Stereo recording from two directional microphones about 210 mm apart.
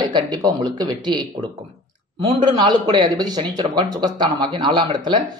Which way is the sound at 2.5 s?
20° right (ahead or behind).